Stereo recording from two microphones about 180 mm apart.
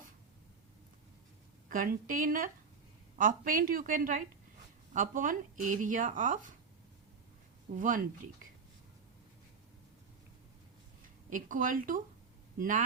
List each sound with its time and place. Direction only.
1.7 s speech: 50° right (ahead or behind)
7.8 s speech: 50° right (ahead or behind)
11.3 s a man's voice: 45° right (ahead or behind)